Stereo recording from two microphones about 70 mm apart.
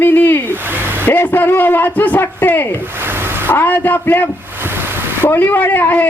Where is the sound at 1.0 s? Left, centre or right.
Left.